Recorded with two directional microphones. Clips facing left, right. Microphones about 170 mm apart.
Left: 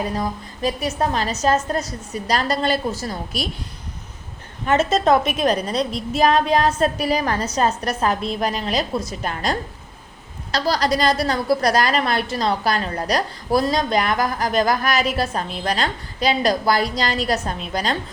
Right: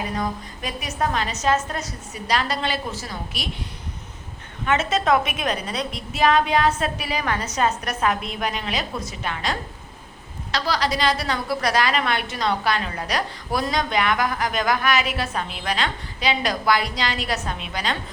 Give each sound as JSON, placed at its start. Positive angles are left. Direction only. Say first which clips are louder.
{"t": 0.2, "sound": "a woman's voice", "louder": "left 3 dB", "side_deg": 30}
{"t": 4.6, "sound": "a woman's voice", "louder": "left 4 dB", "side_deg": 35}